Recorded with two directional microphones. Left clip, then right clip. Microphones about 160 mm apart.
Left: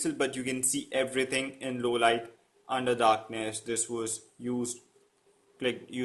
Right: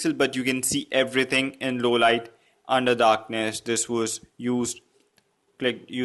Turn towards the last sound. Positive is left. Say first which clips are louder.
# right 5 dB
turn(degrees=-25)  # may be behind; listen again after turning